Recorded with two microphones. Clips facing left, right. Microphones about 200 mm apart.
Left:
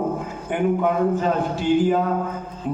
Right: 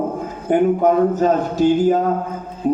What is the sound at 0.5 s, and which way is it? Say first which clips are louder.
Music: right 6 dB; 40° right (ahead or behind).